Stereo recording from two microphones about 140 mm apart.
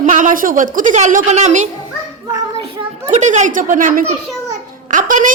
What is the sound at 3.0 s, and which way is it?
A woman's voice, 55° right (ahead or behind).